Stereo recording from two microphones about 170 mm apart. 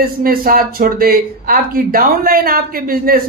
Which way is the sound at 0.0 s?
60° right (ahead or behind).